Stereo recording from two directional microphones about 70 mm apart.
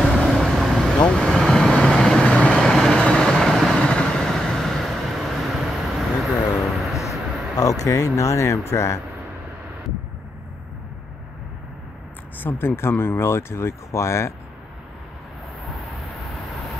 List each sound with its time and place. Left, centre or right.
0.1 s vehicle: centre
0.9 s vehicle: centre
7.5 s speech: left
12.4 s speech: left